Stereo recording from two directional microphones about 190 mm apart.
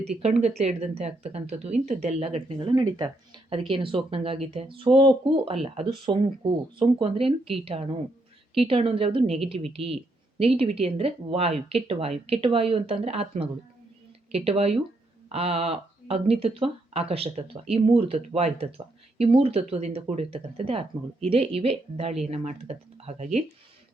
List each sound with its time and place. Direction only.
0.2 s speech: 35° right (ahead or behind)